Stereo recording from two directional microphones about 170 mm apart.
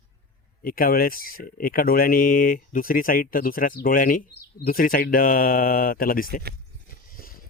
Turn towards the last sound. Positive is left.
turn(degrees=55)  # may be behind; listen again after turning